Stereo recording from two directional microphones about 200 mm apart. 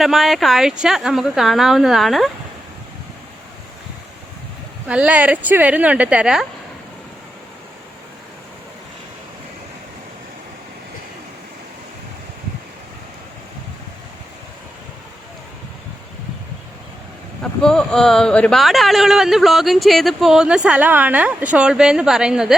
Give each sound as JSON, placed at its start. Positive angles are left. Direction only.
{"t": 0.0, "sound": "speech", "side_deg": 0}
{"t": 4.9, "sound": "speech", "side_deg": -5}
{"t": 17.4, "sound": "speech", "side_deg": 5}